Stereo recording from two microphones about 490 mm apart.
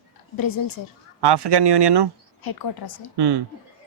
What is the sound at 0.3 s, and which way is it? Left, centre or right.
Speech, left.